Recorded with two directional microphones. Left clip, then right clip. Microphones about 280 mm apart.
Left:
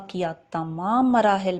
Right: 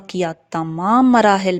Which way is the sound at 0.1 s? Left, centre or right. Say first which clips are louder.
Right 6 dB; right.